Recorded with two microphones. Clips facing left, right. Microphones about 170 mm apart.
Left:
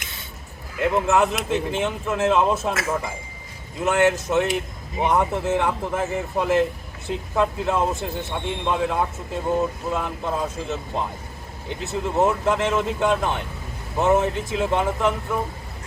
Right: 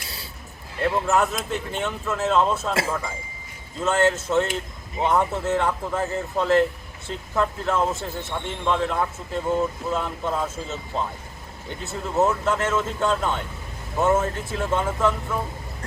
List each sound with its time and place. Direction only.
0.0 s a sound: 35° right (ahead or behind)
0.8 s speech: 20° left (ahead or behind)
3.8 s speech: 15° left (ahead or behind)
11.7 s speech: 20° left (ahead or behind)